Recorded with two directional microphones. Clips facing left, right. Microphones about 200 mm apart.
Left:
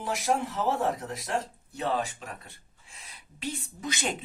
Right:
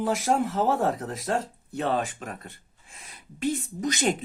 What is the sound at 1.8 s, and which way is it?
Speech, 50° right (ahead or behind).